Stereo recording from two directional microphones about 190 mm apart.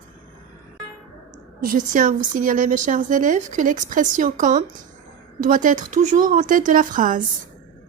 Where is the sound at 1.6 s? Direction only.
45° right (ahead or behind).